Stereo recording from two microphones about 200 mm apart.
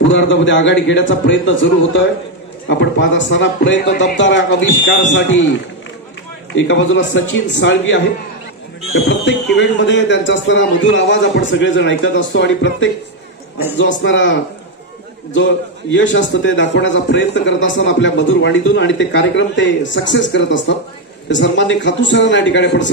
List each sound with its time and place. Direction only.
0.1 s a man's voice: 65° left (ahead or behind)
14.0 s a man's voice: 70° left (ahead or behind)
15.9 s a man's voice: 65° left (ahead or behind)